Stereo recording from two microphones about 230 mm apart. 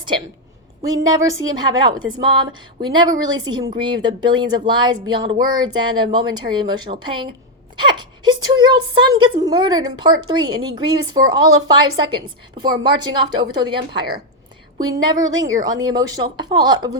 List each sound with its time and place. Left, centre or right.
1.0 s a woman's voice: centre
14.8 s a woman's voice: centre